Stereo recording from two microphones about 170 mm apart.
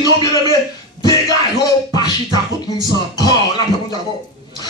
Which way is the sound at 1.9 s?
25° left (ahead or behind).